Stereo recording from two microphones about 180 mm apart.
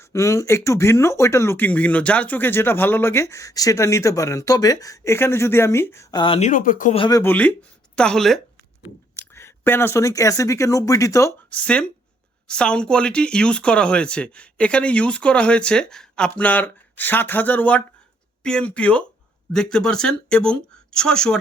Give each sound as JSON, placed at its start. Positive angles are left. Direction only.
{"t": 0.0, "sound": "speech", "side_deg": 15}
{"t": 6.5, "sound": "speech", "side_deg": 50}
{"t": 6.9, "sound": "speech", "side_deg": 25}
{"t": 7.2, "sound": "speech", "side_deg": 10}